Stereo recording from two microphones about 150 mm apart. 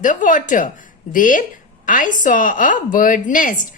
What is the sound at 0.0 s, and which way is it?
A woman's voice, 60° left (ahead or behind).